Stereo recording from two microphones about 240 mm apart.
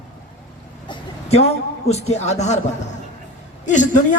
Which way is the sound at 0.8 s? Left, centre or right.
Left.